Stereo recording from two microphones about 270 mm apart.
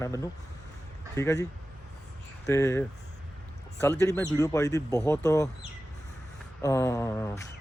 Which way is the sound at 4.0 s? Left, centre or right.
Centre.